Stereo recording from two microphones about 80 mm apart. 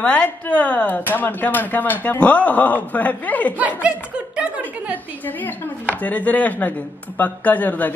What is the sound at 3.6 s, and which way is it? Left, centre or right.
Speech, centre.